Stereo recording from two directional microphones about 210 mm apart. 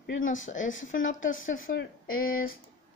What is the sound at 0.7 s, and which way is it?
Speech, 65° left (ahead or behind).